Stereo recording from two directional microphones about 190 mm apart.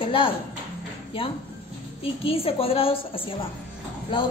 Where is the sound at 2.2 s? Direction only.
30° left (ahead or behind).